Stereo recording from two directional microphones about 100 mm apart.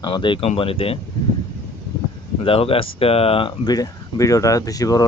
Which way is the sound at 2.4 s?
70° left (ahead or behind).